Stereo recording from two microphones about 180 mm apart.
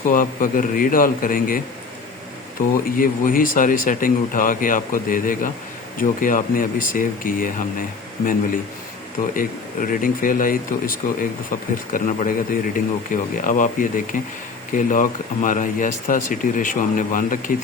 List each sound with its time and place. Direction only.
0.1 s speech: 50° left (ahead or behind)
2.7 s speech: 50° left (ahead or behind)
9.3 s speech: 50° left (ahead or behind)